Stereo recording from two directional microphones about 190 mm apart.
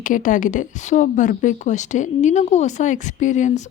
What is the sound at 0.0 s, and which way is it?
Speech, 45° left (ahead or behind).